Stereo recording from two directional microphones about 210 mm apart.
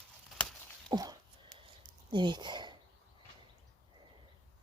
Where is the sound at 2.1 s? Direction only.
20° right (ahead or behind).